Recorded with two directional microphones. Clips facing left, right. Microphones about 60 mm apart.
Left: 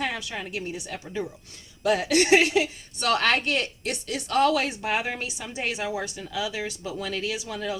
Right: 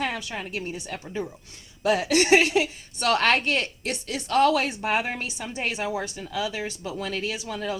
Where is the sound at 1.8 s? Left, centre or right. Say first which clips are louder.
Even; right.